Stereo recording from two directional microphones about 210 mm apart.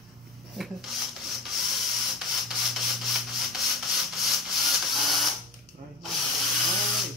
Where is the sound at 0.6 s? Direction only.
Centre (ahead or behind).